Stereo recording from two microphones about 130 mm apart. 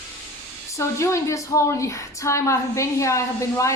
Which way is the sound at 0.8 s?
20° left (ahead or behind).